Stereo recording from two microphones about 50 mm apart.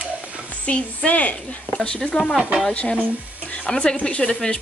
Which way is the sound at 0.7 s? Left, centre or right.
Left.